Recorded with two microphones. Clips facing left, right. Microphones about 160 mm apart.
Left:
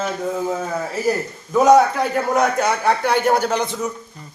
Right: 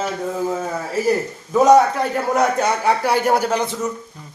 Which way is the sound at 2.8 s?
10° right (ahead or behind).